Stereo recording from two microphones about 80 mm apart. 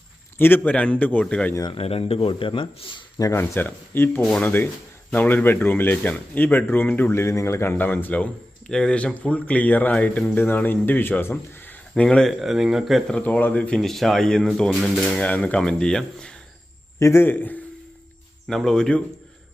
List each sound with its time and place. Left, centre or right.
0.3 s a man's voice: left
0.7 s speech: centre
2.4 s speech: left
3.3 s a man's voice: left
4.2 s speech: centre
4.4 s a man's voice: left
11.9 s speech: centre
12.4 s speech: centre
13.1 s speech: centre
15.2 s speech: centre
17.0 s a man's voice: left
17.2 s a man's voice: left
18.4 s speech: centre